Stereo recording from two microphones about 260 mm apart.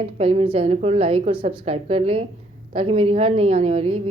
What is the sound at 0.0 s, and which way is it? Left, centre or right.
A woman's voice, right.